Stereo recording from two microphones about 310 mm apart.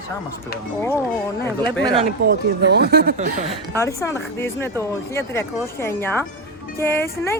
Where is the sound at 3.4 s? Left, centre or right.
Centre.